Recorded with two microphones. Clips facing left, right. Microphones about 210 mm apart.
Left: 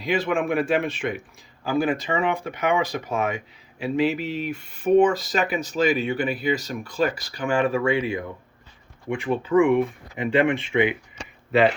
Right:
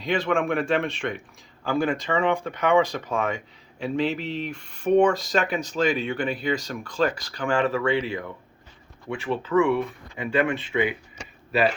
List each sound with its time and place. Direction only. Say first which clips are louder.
0.0 s speech: left 1 dB; 5° left (ahead or behind); by 10.9 s 20° left (ahead or behind)